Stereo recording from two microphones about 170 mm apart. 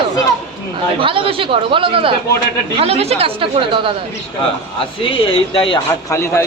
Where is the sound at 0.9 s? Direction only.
30° right (ahead or behind).